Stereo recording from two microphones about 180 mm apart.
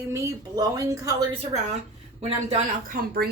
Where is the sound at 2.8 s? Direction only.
55° right (ahead or behind).